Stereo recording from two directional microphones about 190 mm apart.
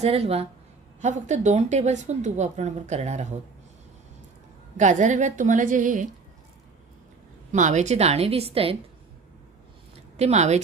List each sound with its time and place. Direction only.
0.0 s a woman's voice: 30° right (ahead or behind)
4.8 s a woman's voice: 40° right (ahead or behind)
7.5 s a woman's voice: 40° right (ahead or behind)
10.2 s a woman's voice: 35° right (ahead or behind)